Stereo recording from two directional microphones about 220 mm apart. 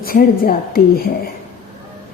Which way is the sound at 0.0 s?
40° left (ahead or behind).